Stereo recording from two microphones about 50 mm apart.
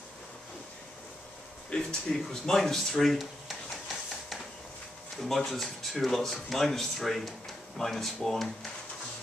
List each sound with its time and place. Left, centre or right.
1.7 s speech: centre
2.2 s speech: centre
5.2 s speech: centre